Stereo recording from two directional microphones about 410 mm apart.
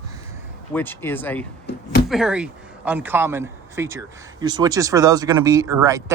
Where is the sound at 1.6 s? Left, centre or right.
Left.